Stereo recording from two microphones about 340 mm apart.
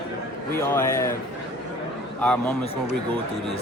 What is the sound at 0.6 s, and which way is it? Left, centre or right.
Speech, centre.